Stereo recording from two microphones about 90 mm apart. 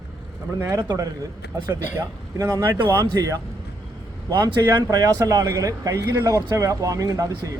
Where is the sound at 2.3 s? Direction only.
40° right (ahead or behind).